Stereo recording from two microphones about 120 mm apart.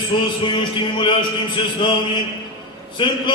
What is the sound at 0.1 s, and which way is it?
Speech, 40° left (ahead or behind).